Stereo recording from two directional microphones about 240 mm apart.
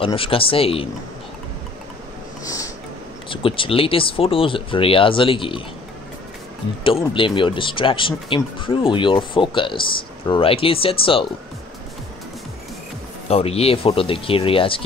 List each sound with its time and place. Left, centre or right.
0.0 s speech: left
2.4 s a sound: centre
3.3 s speech: left
7.2 s speech: left
13.3 s speech: left